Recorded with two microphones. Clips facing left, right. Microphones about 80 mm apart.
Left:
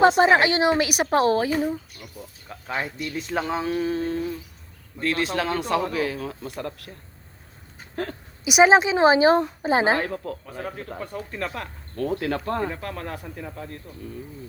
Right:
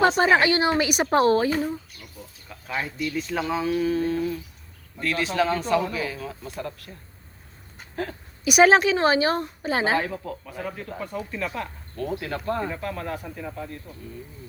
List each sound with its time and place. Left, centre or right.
0.0 s a woman's voice: centre
2.5 s speech: left
5.3 s speech: left
8.4 s speech: centre
10.0 s speech: left
10.4 s speech: left
12.2 s speech: left